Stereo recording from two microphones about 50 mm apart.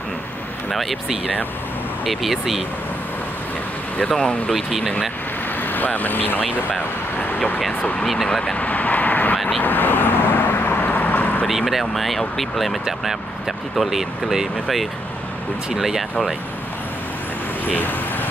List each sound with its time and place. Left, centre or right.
0.7 s speech: centre
4.2 s speech: centre
4.6 s speech: centre
5.6 s speech: left
8.3 s speech: centre
8.5 s vehicle: left
11.4 s speech: centre
17.6 s vehicle: left